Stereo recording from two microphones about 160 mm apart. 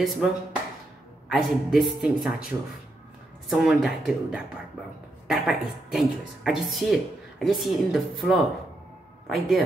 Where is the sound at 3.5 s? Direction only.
Centre (ahead or behind).